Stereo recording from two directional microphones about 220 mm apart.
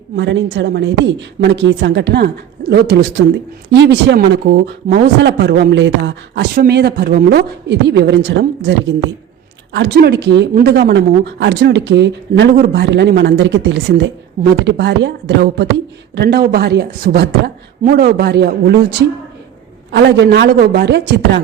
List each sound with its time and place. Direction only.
0.2 s speech: 55° right (ahead or behind)
9.7 s speech: 50° right (ahead or behind)